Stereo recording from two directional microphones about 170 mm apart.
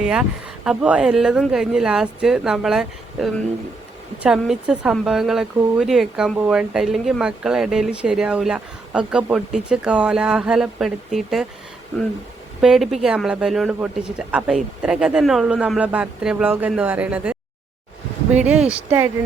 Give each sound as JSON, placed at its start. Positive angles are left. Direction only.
{"t": 0.0, "sound": "speech", "side_deg": -5}
{"t": 12.6, "sound": "speech", "side_deg": -5}
{"t": 18.3, "sound": "speech", "side_deg": -5}